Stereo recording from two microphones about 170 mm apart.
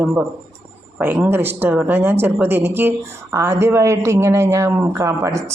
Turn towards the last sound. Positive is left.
turn(degrees=-20)  # may be behind; listen again after turning